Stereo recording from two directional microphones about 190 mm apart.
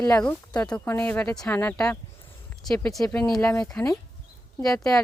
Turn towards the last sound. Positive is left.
turn(degrees=0)  # may be behind; listen again after turning